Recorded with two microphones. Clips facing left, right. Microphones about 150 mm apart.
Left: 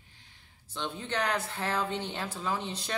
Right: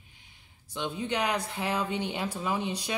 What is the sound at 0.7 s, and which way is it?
A woman's voice, 15° right (ahead or behind).